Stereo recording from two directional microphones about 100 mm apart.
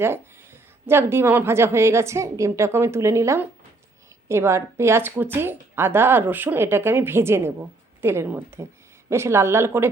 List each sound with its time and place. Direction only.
0.0 s a woman's voice: 25° right (ahead or behind)